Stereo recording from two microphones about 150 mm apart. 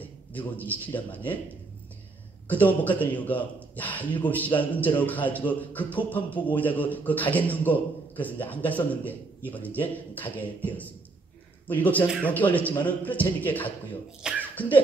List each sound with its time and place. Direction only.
0.6 s a man's voice: 10° left (ahead or behind)
2.4 s a man's voice: 10° left (ahead or behind)
14.5 s laughter: 10° left (ahead or behind)